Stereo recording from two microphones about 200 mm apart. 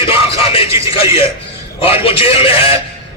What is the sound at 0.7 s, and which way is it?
Speech, 15° right (ahead or behind).